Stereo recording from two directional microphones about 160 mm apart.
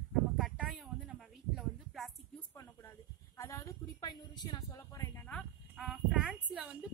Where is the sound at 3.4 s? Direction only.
20° left (ahead or behind).